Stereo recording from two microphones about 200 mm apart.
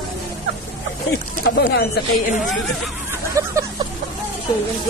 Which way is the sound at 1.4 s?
55° left (ahead or behind).